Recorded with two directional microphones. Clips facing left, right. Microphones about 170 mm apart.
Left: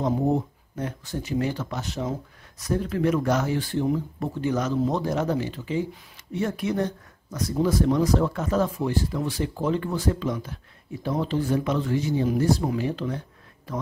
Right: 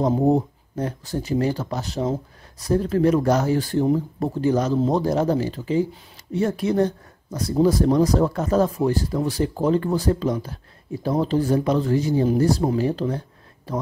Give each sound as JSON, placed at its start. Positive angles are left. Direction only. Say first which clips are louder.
{"t": 0.0, "sound": "speech", "louder": "right 5 dB", "side_deg": -35}